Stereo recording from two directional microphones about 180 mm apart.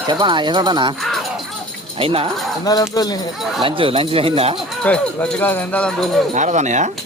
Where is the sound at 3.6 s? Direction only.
30° right (ahead or behind).